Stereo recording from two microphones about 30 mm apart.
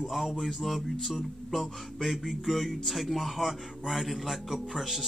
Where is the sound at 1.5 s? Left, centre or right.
Centre.